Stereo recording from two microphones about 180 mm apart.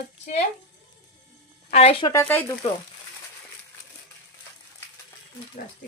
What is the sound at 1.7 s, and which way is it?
Speech, 35° left (ahead or behind).